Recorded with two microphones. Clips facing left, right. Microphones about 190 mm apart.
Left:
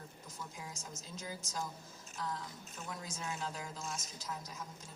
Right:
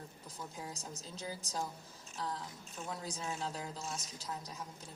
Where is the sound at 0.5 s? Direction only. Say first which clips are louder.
Right 3 dB; 35° right (ahead or behind).